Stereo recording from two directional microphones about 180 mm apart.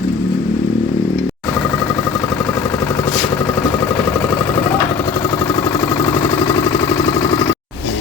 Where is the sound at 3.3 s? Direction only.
15° left (ahead or behind).